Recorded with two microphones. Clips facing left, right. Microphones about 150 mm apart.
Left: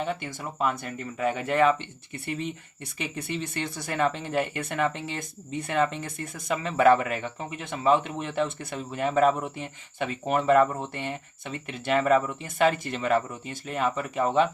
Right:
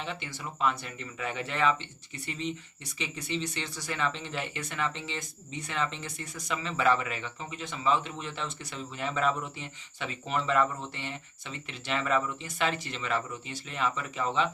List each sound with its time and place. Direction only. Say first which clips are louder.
0.0 s speech: left 7 dB; 50° left (ahead or behind)